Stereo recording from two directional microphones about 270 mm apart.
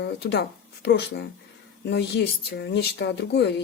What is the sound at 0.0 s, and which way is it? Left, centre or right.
Speech, left.